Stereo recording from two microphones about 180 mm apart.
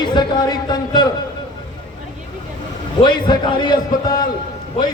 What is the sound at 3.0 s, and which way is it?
Speech, 25° left (ahead or behind).